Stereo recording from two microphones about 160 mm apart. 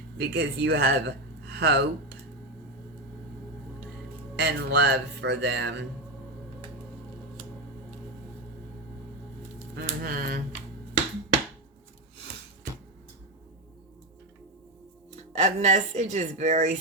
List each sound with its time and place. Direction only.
0.2 s speech: 90° right
4.4 s speech: 90° right
9.7 s a sound: 70° right (ahead or behind)
15.1 s speech: 45° right (ahead or behind)